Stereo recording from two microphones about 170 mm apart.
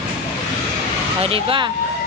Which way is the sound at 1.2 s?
35° right (ahead or behind).